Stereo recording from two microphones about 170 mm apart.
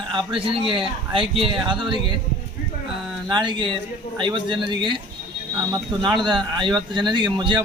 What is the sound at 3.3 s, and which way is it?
A man's voice, 25° right (ahead or behind).